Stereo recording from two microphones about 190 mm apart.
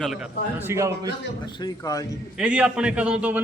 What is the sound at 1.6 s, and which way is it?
Speech, 20° left (ahead or behind).